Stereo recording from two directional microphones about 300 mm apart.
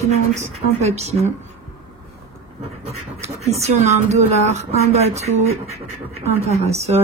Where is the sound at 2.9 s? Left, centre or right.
Right.